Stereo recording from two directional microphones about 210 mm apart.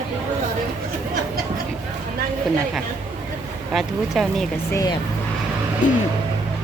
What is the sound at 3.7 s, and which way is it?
Speech, centre (ahead or behind).